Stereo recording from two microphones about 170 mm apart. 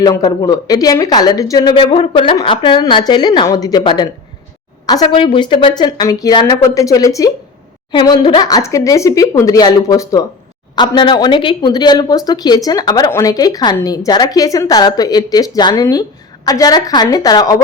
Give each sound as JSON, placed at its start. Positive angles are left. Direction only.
{"t": 0.0, "sound": "speech", "side_deg": 20}